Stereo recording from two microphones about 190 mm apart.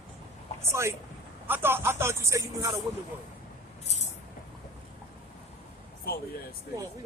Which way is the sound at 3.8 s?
35° left (ahead or behind).